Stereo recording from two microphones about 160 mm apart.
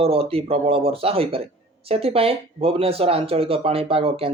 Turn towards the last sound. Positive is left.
turn(degrees=-35)  # may be behind; listen again after turning